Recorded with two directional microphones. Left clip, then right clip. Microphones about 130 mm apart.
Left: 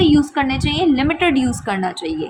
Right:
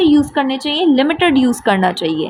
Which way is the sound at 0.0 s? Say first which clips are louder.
Right 2 dB; 25° right (ahead or behind).